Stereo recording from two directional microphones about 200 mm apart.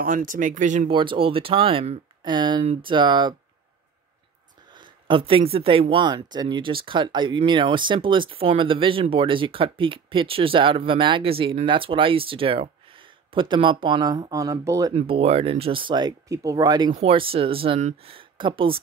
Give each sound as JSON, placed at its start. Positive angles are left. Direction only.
{"t": 0.0, "sound": "speech", "side_deg": -40}
{"t": 0.8, "sound": "speech", "side_deg": -25}
{"t": 4.7, "sound": "speech", "side_deg": -25}
{"t": 15.0, "sound": "speech", "side_deg": -30}